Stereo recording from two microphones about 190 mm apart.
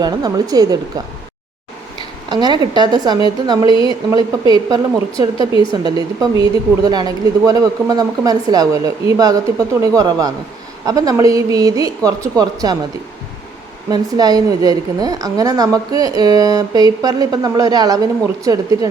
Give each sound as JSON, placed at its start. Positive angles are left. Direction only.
{"t": 0.0, "sound": "a woman's voice", "side_deg": -20}
{"t": 2.3, "sound": "a woman's voice", "side_deg": -20}
{"t": 13.9, "sound": "a woman's voice", "side_deg": -20}